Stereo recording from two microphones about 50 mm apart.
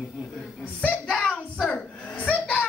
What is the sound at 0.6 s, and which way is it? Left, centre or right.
Speech, left.